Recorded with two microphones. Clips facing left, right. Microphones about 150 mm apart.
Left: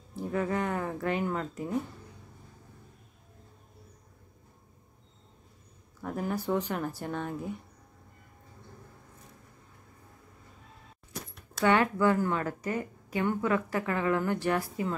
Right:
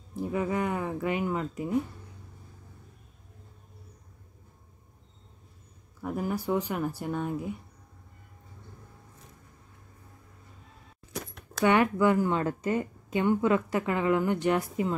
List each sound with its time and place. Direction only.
0.1 s speech: 10° right (ahead or behind)
6.0 s speech: 10° right (ahead or behind)
11.6 s a woman's voice: 15° right (ahead or behind)